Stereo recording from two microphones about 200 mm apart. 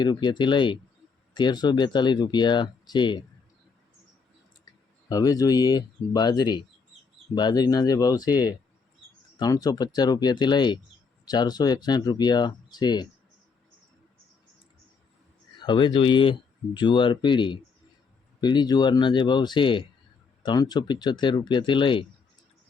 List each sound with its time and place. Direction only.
0.0 s speech: 20° left (ahead or behind)
5.0 s speech: 20° left (ahead or behind)
15.5 s speech: 20° left (ahead or behind)